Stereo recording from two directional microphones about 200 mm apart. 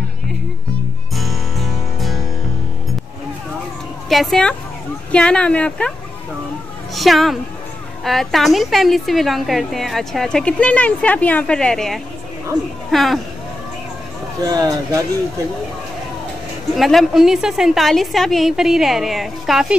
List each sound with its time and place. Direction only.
1.1 s music: centre (ahead or behind)
4.1 s a woman's voice: centre (ahead or behind)
7.0 s a woman's voice: centre (ahead or behind)
14.4 s speech: 15° right (ahead or behind)
16.7 s a woman's voice: centre (ahead or behind)